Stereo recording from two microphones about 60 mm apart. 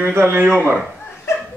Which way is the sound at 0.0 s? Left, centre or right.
Right.